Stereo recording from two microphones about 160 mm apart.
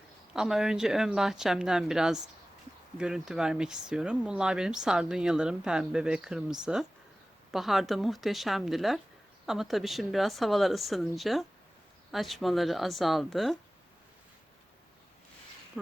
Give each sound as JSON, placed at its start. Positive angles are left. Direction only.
{"t": 0.3, "sound": "speech", "side_deg": 0}